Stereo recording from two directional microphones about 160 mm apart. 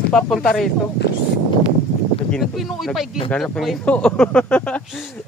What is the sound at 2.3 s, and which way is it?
Speech, centre (ahead or behind).